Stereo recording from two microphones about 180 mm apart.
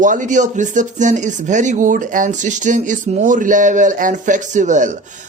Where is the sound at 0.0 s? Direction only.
45° right (ahead or behind).